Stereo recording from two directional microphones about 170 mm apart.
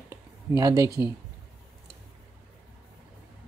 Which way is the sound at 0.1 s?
20° right (ahead or behind).